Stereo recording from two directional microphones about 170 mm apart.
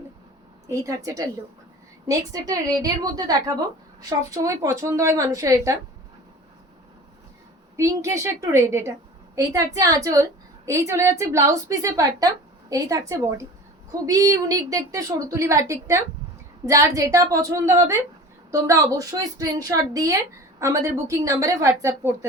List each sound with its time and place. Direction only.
0.7 s a woman's voice: 20° right (ahead or behind)
7.8 s a woman's voice: 15° right (ahead or behind)